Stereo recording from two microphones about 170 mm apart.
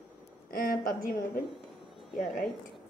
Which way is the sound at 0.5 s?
55° left (ahead or behind).